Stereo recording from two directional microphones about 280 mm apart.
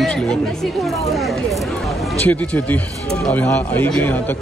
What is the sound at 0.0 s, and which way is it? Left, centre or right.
Speech, centre.